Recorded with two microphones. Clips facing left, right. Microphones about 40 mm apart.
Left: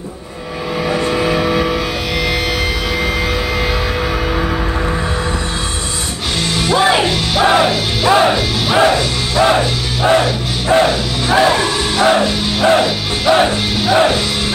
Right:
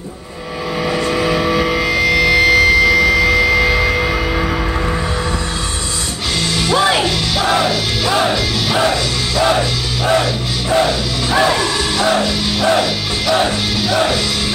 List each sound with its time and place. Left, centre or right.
1.0 s a sound: left
2.3 s vehicle: right
3.0 s vehicle: left
3.4 s vehicle: right
6.7 s music: left